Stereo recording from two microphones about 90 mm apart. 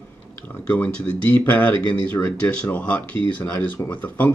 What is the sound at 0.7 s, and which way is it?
Speech, 15° left (ahead or behind).